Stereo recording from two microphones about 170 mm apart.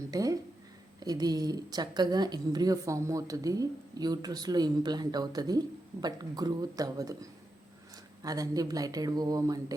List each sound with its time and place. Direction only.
0.1 s speech: 20° right (ahead or behind)